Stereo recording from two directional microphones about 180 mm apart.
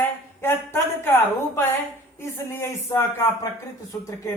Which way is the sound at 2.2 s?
15° left (ahead or behind).